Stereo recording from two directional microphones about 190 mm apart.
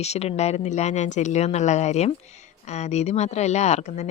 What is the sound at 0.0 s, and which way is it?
Speech, 35° left (ahead or behind).